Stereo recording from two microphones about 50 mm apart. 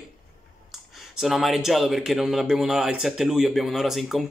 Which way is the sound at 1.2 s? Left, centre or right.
Centre.